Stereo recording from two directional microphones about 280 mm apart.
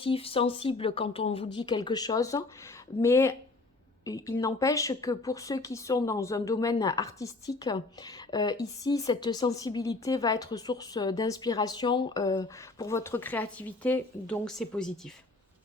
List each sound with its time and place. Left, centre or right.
0.0 s speech: centre